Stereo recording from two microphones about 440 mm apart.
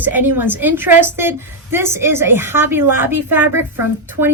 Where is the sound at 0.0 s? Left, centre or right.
Centre.